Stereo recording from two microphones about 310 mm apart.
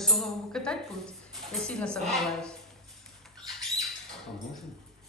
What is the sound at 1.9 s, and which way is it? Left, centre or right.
Speech, centre.